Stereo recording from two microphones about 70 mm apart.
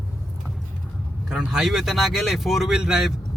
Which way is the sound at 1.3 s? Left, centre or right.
Centre.